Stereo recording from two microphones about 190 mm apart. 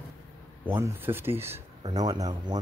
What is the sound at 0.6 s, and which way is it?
Speech, 10° right (ahead or behind).